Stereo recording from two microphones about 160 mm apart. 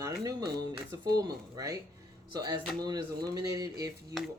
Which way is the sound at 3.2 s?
25° right (ahead or behind).